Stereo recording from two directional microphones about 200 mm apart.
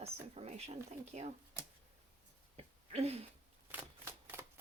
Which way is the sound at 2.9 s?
30° right (ahead or behind).